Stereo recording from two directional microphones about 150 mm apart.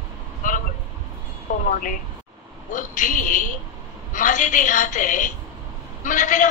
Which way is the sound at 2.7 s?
60° left (ahead or behind).